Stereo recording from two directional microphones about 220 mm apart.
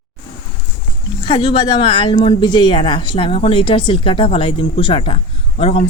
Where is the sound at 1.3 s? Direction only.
20° left (ahead or behind).